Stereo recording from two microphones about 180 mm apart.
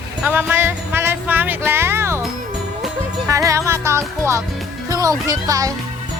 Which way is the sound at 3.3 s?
15° right (ahead or behind).